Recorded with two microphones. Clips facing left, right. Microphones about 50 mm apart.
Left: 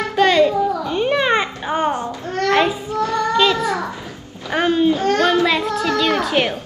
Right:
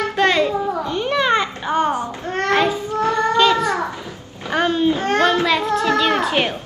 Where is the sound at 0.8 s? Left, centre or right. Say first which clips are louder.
Left 1 dB; centre.